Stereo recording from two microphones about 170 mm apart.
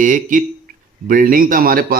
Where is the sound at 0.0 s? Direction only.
50° right (ahead or behind).